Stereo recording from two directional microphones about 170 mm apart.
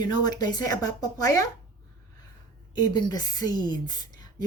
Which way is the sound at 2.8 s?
25° left (ahead or behind).